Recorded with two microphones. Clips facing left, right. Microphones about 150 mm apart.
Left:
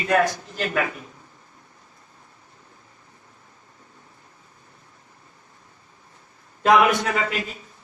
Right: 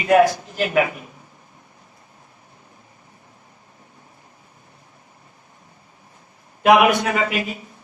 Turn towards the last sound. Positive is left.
turn(degrees=-15)  # may be behind; listen again after turning